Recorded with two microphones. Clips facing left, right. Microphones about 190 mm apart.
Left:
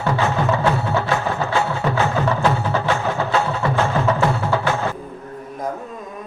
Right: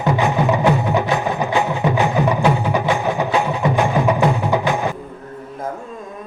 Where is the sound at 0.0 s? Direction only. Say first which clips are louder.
Right 3 dB; 15° right (ahead or behind).